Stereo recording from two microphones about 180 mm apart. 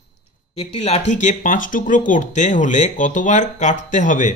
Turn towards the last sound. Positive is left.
turn(degrees=45)  # may be behind; listen again after turning